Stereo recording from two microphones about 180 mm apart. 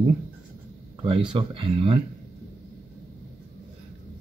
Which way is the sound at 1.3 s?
30° right (ahead or behind).